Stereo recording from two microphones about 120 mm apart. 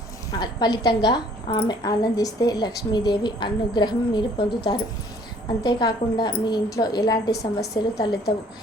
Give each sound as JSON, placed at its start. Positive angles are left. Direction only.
{"t": 0.3, "sound": "a woman's voice", "side_deg": 35}